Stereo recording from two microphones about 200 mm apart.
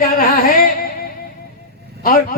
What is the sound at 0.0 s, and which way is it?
Music, 45° left (ahead or behind).